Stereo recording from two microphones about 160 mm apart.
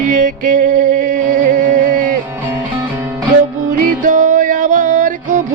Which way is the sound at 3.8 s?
55° right (ahead or behind).